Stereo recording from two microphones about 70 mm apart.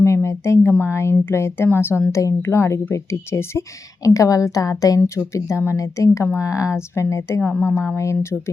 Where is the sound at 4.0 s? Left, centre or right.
Left.